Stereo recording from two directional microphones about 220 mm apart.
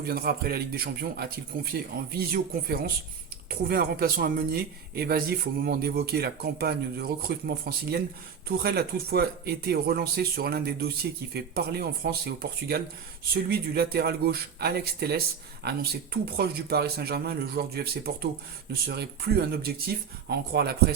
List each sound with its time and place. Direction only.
0.0 s speech: 45° right (ahead or behind)